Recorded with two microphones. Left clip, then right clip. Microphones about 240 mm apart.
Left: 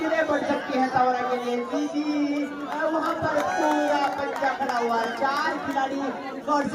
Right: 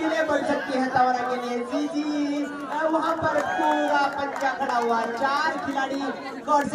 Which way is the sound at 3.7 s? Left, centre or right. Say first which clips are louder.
Right 1 dB; right.